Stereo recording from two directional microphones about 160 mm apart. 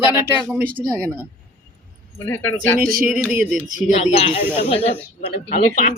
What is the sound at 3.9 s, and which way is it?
Speech, 40° left (ahead or behind).